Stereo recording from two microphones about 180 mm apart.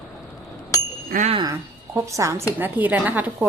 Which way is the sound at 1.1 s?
45° right (ahead or behind).